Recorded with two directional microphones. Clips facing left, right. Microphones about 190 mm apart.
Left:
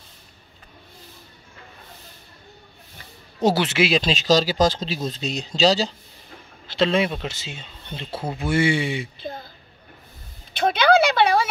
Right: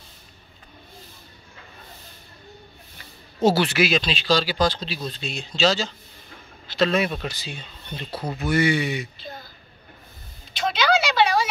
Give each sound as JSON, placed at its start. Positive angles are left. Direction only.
{"t": 3.4, "sound": "speech", "side_deg": 20}
{"t": 4.0, "sound": "speech", "side_deg": 40}
{"t": 10.5, "sound": "a sound", "side_deg": 55}